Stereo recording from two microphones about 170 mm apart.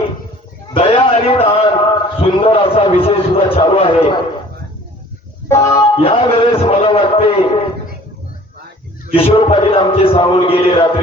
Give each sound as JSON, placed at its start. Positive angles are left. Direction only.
{"t": 0.7, "sound": "a sound", "side_deg": 35}
{"t": 5.5, "sound": "music", "side_deg": 15}
{"t": 6.0, "sound": "a man's voice", "side_deg": 35}
{"t": 9.1, "sound": "a man's voice", "side_deg": 35}